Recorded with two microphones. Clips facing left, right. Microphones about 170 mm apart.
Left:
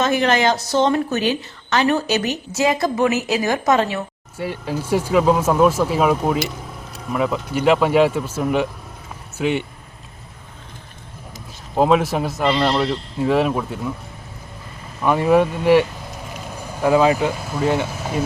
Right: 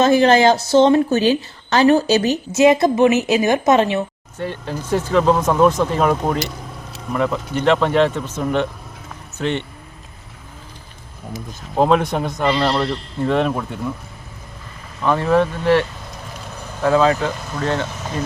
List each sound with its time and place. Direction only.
0.0 s a woman's voice: 30° right (ahead or behind)
4.4 s speech: 10° left (ahead or behind)
11.8 s a man's voice: 5° left (ahead or behind)
15.0 s speech: 15° left (ahead or behind)